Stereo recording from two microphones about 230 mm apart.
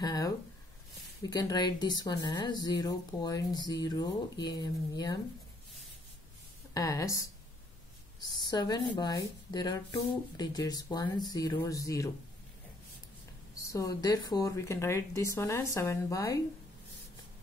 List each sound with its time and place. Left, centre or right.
0.0 s a sound: centre
1.3 s speech: centre
6.7 s a woman's voice: centre
13.7 s speech: centre